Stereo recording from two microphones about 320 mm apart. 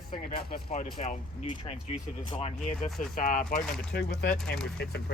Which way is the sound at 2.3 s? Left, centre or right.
Centre.